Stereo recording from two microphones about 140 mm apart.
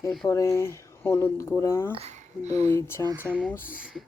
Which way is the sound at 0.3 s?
20° left (ahead or behind).